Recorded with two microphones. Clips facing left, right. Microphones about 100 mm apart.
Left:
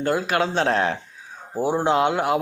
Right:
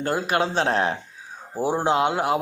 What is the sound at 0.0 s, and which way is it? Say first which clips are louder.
Speech: left 1 dB; 35° right (ahead or behind).